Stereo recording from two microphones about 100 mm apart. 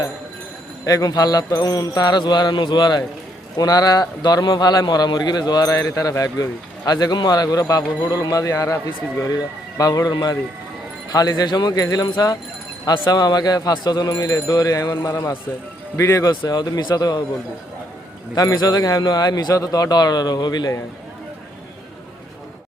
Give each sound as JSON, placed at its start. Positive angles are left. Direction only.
{"t": 0.9, "sound": "a man's voice", "side_deg": 35}
{"t": 16.3, "sound": "speech", "side_deg": 45}
{"t": 18.3, "sound": "a man's voice", "side_deg": 40}